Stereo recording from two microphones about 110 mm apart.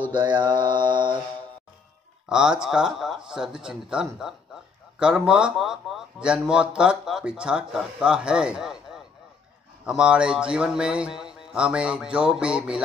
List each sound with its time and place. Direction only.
0.4 s mantra: 40° right (ahead or behind)
2.2 s speech: 5° right (ahead or behind)